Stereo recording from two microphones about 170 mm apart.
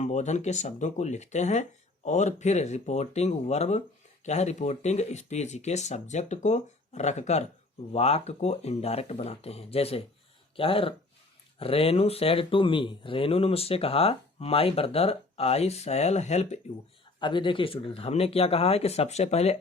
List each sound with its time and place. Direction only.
0.0 s speech: 45° left (ahead or behind)
17.2 s speech: 30° left (ahead or behind)